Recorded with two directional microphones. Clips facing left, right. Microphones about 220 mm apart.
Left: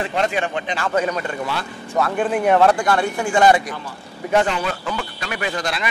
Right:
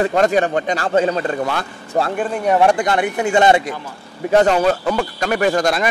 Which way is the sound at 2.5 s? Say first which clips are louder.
Right 2 dB; 15° right (ahead or behind).